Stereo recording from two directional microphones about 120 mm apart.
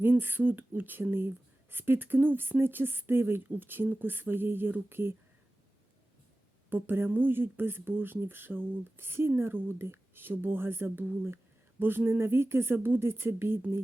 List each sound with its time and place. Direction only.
0.0 s speech: 15° right (ahead or behind)
6.7 s speech: 15° right (ahead or behind)